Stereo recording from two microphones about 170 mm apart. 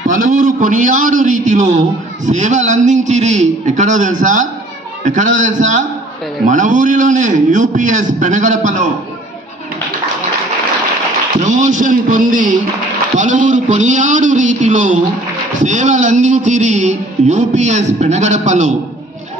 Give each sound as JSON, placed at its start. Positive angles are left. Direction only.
{"t": 0.3, "sound": "a man's voice", "side_deg": -50}
{"t": 11.4, "sound": "a man's voice", "side_deg": -45}